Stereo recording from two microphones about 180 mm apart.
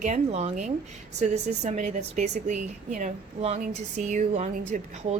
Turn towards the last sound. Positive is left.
turn(degrees=-40)  # may be behind; listen again after turning